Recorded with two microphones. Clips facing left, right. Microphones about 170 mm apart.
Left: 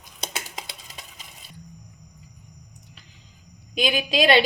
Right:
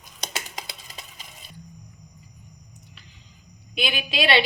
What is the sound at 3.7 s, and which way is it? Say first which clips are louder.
Speech: left 4 dB; 40° left (ahead or behind).